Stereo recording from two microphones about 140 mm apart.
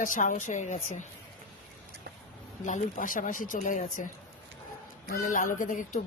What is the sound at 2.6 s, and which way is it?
Speech, 65° left (ahead or behind).